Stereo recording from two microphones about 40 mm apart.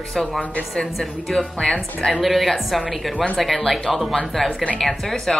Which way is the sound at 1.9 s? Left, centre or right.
Centre.